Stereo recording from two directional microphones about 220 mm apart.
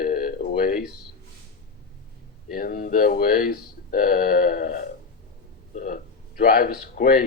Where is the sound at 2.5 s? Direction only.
40° left (ahead or behind).